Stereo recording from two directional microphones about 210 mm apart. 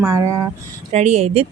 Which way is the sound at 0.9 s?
30° right (ahead or behind).